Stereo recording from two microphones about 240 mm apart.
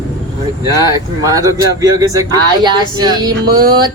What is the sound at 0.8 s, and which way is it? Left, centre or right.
Speech, centre.